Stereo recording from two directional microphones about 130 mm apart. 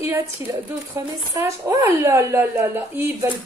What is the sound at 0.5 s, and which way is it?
Speech, 20° right (ahead or behind).